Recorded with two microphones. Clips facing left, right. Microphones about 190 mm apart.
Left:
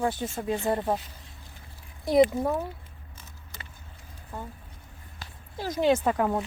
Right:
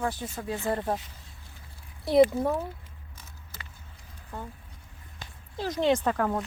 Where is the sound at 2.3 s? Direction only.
5° left (ahead or behind).